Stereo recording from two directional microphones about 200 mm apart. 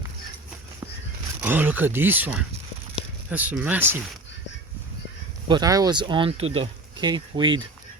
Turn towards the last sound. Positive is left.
turn(degrees=-25)  # may be behind; listen again after turning